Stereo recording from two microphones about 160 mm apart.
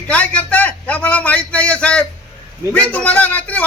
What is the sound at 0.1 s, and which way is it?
A man's voice, 10° left (ahead or behind).